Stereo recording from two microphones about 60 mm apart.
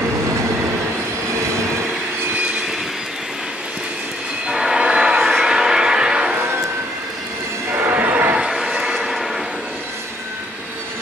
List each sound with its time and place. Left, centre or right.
4.5 s train: centre
5.2 s a sound: centre
5.5 s music: centre
7.7 s music: right
8.5 s train: centre